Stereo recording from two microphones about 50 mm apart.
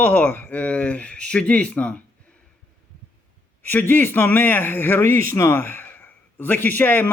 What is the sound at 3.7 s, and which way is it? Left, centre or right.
Speech, left.